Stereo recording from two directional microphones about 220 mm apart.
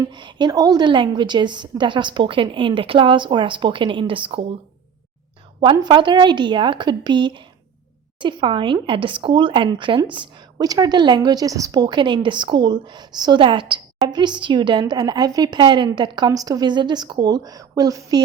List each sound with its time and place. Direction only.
0.0 s speech: 20° right (ahead or behind)
5.7 s speech: 20° right (ahead or behind)